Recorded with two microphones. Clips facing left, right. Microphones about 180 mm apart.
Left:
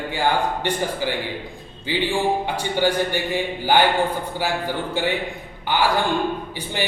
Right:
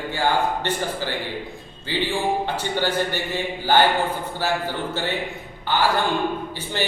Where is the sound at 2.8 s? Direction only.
15° left (ahead or behind).